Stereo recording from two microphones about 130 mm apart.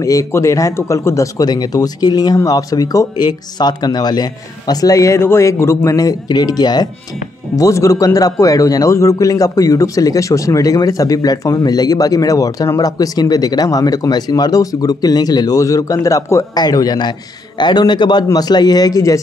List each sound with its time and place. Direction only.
0.0 s a man's voice: 25° left (ahead or behind)